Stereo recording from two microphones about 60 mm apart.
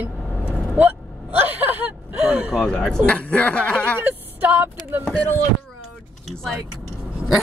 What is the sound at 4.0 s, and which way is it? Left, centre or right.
Speech, right.